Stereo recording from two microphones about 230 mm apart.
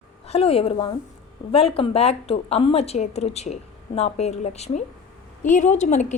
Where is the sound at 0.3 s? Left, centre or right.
Left.